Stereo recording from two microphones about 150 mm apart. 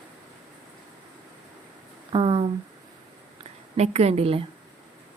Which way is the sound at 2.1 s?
35° right (ahead or behind).